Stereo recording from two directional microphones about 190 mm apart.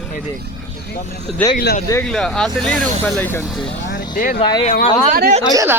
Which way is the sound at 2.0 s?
Centre (ahead or behind).